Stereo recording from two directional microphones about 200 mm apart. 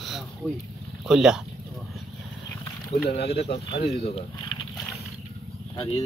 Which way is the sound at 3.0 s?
55° left (ahead or behind).